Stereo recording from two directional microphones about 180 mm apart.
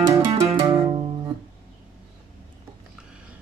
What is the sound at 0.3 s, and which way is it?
Music, 35° right (ahead or behind).